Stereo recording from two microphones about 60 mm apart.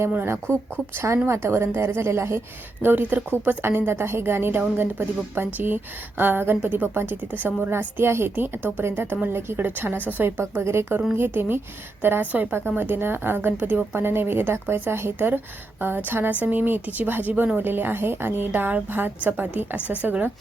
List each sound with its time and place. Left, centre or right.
0.5 s a woman's voice: right
2.8 s a woman's voice: right
11.1 s a woman's voice: right